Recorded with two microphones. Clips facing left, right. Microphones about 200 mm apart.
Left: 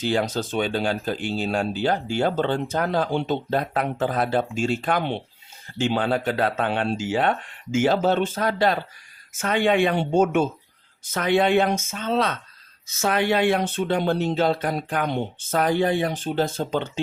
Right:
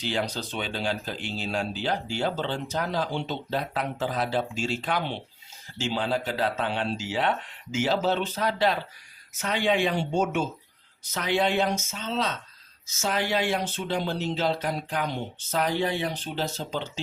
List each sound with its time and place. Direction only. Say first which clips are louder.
0.0 s speech: left 6 dB; 45° left (ahead or behind)